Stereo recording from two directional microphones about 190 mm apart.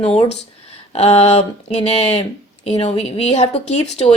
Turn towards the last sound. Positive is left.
turn(degrees=35)  # may be behind; listen again after turning